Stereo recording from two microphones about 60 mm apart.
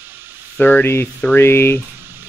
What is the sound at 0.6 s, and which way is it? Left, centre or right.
Speech, left.